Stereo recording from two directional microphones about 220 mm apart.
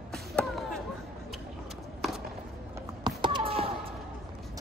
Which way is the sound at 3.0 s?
20° right (ahead or behind).